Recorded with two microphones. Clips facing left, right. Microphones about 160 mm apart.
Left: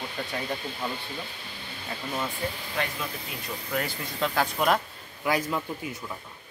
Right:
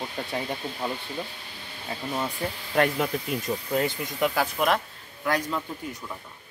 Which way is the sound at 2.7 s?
50° right (ahead or behind).